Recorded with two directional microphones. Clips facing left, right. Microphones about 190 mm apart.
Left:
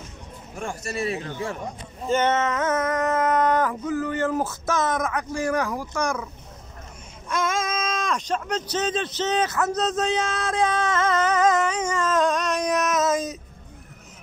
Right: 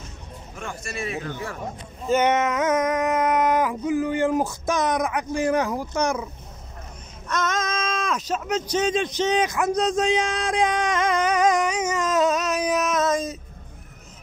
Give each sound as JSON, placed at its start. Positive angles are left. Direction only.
{"t": 0.6, "sound": "speech", "side_deg": 35}
{"t": 2.0, "sound": "a sound", "side_deg": -10}
{"t": 7.2, "sound": "speech", "side_deg": 10}